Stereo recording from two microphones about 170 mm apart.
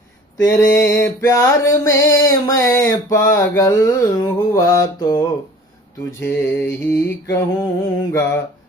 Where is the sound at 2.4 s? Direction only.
15° left (ahead or behind).